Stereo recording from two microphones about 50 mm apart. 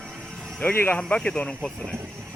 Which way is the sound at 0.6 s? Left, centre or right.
Left.